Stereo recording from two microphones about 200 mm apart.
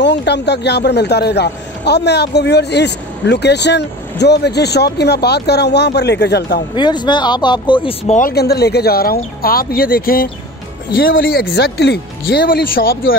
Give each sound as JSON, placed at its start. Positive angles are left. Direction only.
{"t": 0.0, "sound": "a man's voice", "side_deg": 60}
{"t": 6.7, "sound": "speech", "side_deg": 20}
{"t": 8.1, "sound": "speech", "side_deg": 45}